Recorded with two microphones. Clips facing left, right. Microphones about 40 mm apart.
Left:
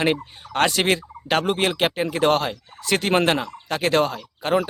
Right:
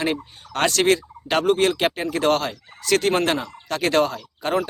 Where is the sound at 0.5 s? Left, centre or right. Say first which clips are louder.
Right 1 dB; centre.